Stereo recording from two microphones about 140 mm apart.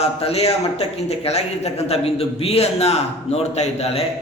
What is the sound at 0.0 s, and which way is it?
Speech, 45° left (ahead or behind).